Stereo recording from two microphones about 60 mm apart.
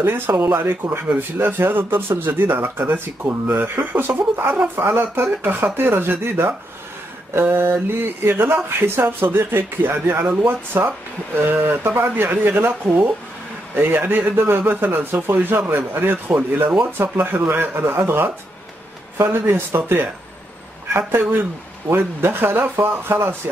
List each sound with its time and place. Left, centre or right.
0.0 s speech: right